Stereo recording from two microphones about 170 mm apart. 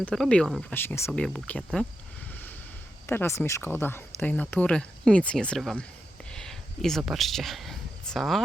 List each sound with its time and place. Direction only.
0.0 s speech: 5° left (ahead or behind)
3.1 s speech: 15° left (ahead or behind)
6.3 s a sound: 5° left (ahead or behind)